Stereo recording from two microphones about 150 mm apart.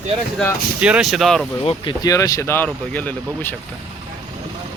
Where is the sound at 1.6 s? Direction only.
30° left (ahead or behind); by 3.5 s 10° left (ahead or behind).